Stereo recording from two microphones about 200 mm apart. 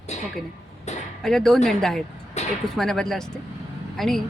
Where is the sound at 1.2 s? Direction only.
Centre (ahead or behind).